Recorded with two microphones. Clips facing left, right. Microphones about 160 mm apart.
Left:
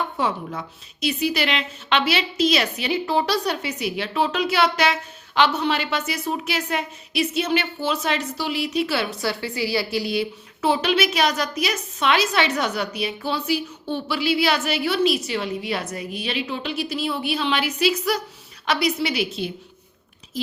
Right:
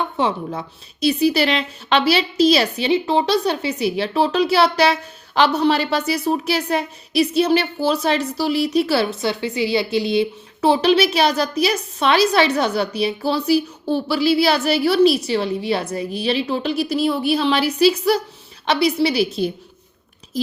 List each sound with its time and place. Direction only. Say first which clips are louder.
0.2 s a woman's voice: right 4 dB; 25° right (ahead or behind)
9.2 s a woman's voice: right 4 dB; 20° right (ahead or behind); by 20.5 s 40° right (ahead or behind)